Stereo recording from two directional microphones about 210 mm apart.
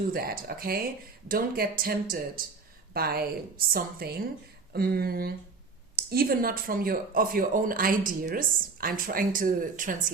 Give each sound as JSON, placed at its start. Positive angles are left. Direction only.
{"t": 0.1, "sound": "speech", "side_deg": -45}